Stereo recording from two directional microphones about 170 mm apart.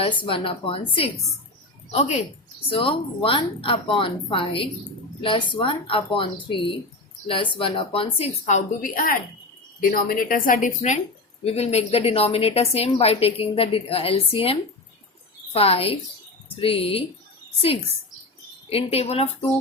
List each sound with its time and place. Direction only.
0.2 s a woman's voice: 30° left (ahead or behind)